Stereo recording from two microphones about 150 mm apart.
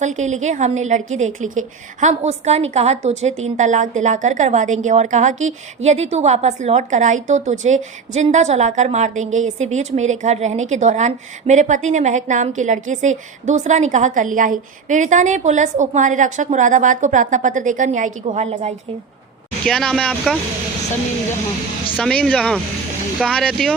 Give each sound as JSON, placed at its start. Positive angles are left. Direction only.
{"t": 0.0, "sound": "a woman's voice", "side_deg": -50}
{"t": 18.4, "sound": "a woman's voice", "side_deg": -40}
{"t": 19.6, "sound": "speech", "side_deg": 5}
{"t": 21.9, "sound": "speech", "side_deg": 5}